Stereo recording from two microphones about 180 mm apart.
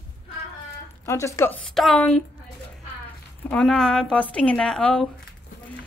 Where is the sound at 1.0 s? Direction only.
15° left (ahead or behind).